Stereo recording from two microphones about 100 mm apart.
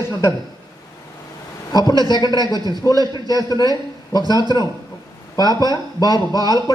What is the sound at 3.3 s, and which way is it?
A man's voice, 40° left (ahead or behind).